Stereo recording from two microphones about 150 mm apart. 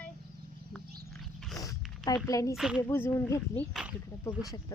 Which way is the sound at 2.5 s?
5° right (ahead or behind).